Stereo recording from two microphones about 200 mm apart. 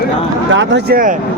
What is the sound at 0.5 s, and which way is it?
Speech, 65° right (ahead or behind).